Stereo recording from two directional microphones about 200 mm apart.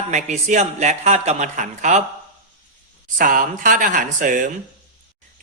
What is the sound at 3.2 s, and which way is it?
A man's voice, 40° right (ahead or behind).